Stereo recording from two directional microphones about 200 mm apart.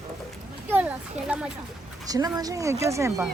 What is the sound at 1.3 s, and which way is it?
Speech, 10° right (ahead or behind).